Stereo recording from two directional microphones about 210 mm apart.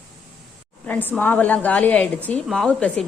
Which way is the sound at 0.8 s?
10° left (ahead or behind).